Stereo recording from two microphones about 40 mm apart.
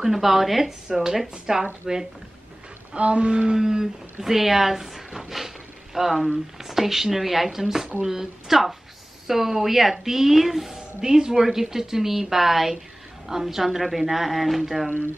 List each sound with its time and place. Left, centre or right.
0.0 s a woman's voice: centre
3.0 s a woman's voice: right; by 14.9 s centre